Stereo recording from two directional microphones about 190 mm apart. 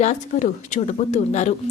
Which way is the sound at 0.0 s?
40° left (ahead or behind).